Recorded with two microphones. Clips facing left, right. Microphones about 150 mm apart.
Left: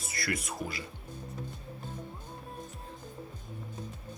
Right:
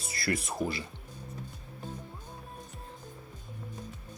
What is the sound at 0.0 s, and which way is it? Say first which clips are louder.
Speech: right 3 dB; 30° right (ahead or behind).